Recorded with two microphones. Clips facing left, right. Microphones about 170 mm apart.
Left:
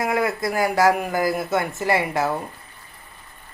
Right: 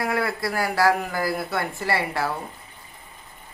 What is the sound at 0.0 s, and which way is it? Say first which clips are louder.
Speech: left 3 dB; 20° left (ahead or behind).